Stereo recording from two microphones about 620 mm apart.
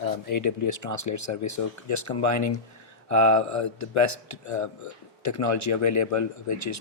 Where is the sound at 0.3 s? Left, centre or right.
Left.